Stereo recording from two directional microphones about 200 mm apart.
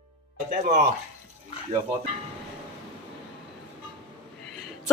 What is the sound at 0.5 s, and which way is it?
Speech, 45° right (ahead or behind).